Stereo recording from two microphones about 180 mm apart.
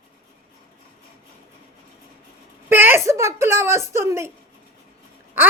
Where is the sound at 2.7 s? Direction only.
10° right (ahead or behind).